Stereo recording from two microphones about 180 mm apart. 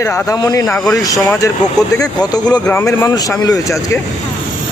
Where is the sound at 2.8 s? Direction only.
20° left (ahead or behind).